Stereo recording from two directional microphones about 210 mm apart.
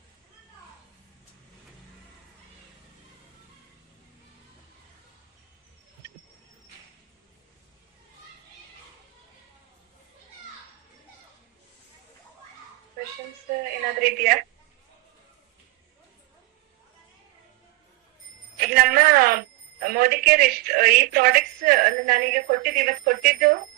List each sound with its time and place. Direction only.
14.0 s a woman's voice: 45° right (ahead or behind)
18.5 s a woman's voice: 45° right (ahead or behind)